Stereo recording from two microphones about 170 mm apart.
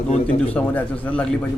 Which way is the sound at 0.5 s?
10° left (ahead or behind).